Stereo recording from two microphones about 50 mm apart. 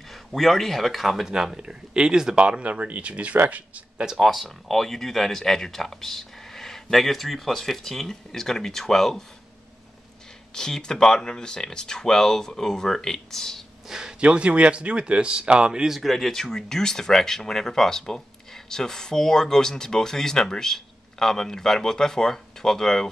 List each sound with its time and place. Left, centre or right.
0.1 s speech: centre; by 3.8 s right
4.0 s speech: centre
4.3 s speech: centre
10.5 s speech: centre
13.8 s a sound: centre
14.2 s speech: right
15.9 s speech: centre